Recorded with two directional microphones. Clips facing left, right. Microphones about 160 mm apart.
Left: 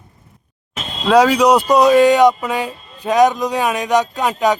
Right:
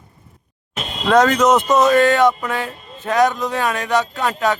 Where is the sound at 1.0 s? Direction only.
10° left (ahead or behind).